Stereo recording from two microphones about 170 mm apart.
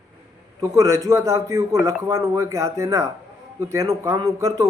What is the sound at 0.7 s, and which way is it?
A man's voice, 20° right (ahead or behind).